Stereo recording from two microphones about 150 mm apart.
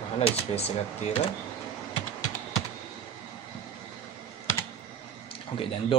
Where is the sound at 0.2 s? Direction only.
45° left (ahead or behind).